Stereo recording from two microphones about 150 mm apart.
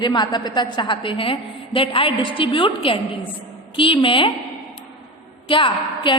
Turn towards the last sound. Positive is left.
turn(degrees=35)  # may be behind; listen again after turning